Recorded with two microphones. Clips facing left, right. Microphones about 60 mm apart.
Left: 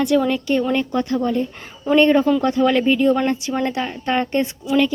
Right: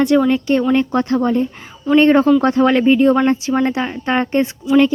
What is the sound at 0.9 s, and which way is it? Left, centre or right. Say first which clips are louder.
Speech: right 4 dB; right.